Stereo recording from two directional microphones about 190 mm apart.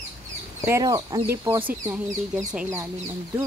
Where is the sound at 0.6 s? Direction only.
15° right (ahead or behind).